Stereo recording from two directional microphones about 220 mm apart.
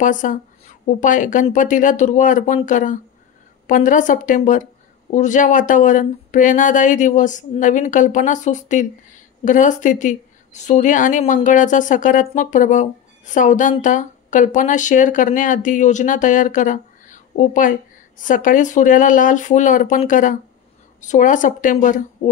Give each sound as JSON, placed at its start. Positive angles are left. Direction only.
{"t": 0.0, "sound": "speech", "side_deg": 35}